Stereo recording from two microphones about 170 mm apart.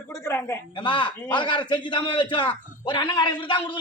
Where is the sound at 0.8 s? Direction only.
30° left (ahead or behind).